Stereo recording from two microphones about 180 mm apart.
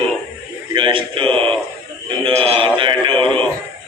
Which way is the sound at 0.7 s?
30° right (ahead or behind).